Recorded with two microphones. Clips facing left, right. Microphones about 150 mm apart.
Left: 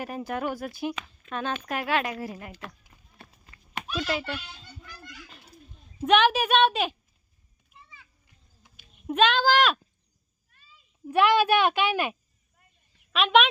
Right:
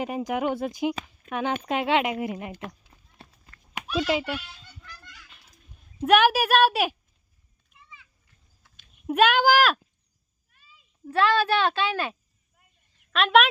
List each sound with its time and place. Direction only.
0.0 s speech: 15° right (ahead or behind)
3.2 s clip-clop: 30° right (ahead or behind)
3.8 s a child's voice: 10° right (ahead or behind)
6.1 s speech: 10° right (ahead or behind)
8.6 s a sound: 10° left (ahead or behind)
9.0 s speech: 10° right (ahead or behind)
11.0 s speech: 15° left (ahead or behind)
13.1 s speech: centre (ahead or behind)